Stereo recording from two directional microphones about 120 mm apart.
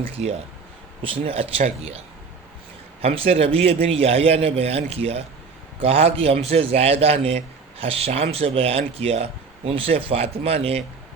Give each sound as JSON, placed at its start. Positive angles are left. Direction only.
{"t": 0.0, "sound": "a man's voice", "side_deg": -60}
{"t": 1.0, "sound": "a man's voice", "side_deg": -50}
{"t": 3.0, "sound": "a man's voice", "side_deg": -55}